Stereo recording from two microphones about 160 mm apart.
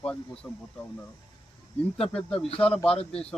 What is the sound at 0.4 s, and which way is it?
Speech, 20° left (ahead or behind).